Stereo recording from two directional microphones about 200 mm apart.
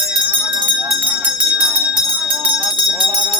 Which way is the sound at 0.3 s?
5° right (ahead or behind).